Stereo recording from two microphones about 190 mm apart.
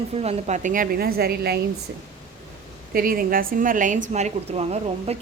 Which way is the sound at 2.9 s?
50° right (ahead or behind).